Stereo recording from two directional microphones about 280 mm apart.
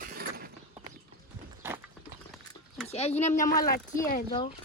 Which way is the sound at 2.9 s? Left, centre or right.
Left.